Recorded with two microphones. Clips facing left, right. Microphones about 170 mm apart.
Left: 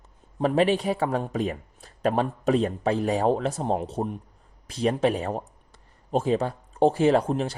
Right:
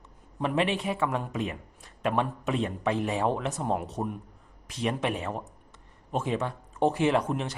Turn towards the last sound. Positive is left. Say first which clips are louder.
# left 5 dB
turn(degrees=30)  # may be behind; listen again after turning